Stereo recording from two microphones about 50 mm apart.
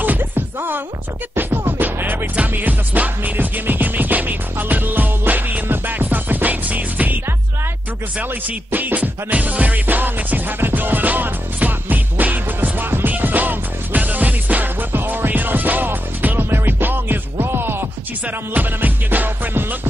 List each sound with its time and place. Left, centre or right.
0.0 s music: right
0.6 s speech: right
1.7 s music: right
8.2 s music: right
18.2 s music: right